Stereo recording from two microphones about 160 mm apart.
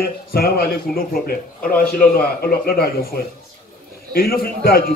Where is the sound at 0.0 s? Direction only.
70° left (ahead or behind).